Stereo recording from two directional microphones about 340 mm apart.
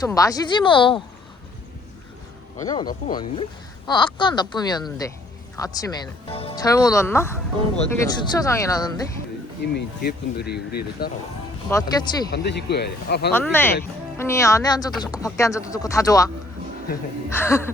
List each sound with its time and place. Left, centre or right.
0.0 s speech: centre
2.6 s speech: centre
9.7 s speech: left
11.7 s speech: centre
12.3 s speech: left
13.3 s speech: centre
17.3 s speech: centre